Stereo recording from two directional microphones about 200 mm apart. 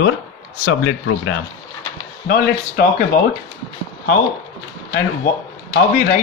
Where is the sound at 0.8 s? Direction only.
90° left.